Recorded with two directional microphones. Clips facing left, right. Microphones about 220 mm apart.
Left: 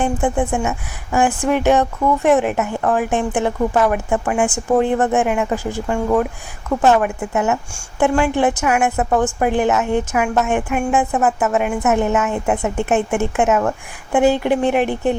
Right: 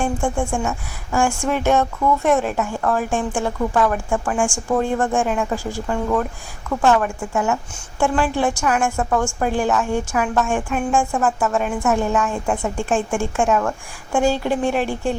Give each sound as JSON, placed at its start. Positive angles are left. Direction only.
{"t": 0.0, "sound": "a woman's voice", "side_deg": 20}
{"t": 0.5, "sound": "a woman's voice", "side_deg": 5}
{"t": 1.1, "sound": "a woman's voice", "side_deg": 15}
{"t": 3.9, "sound": "a woman's voice", "side_deg": 5}
{"t": 4.4, "sound": "a woman's voice", "side_deg": 20}
{"t": 5.2, "sound": "a woman's voice", "side_deg": 10}
{"t": 11.8, "sound": "a woman's voice", "side_deg": 20}